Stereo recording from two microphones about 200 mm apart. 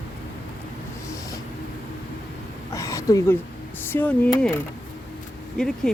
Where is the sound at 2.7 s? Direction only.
15° left (ahead or behind).